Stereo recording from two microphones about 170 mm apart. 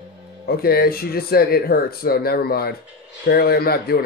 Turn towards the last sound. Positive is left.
turn(degrees=60)  # may be behind; listen again after turning